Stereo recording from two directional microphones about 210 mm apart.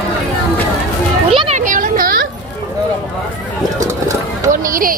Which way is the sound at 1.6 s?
40° right (ahead or behind).